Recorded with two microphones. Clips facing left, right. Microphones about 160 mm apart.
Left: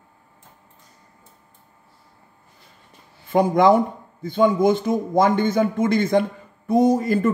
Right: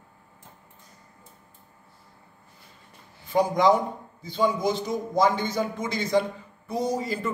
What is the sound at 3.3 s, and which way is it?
A man's voice, 55° left (ahead or behind).